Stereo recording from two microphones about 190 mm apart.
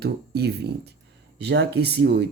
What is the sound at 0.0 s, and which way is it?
Speech, 60° right (ahead or behind).